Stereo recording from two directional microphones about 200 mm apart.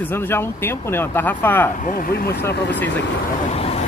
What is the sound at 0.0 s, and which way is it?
Speech, 10° left (ahead or behind).